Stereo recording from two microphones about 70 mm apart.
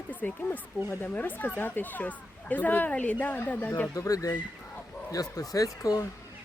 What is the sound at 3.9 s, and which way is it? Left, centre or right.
Speech, left.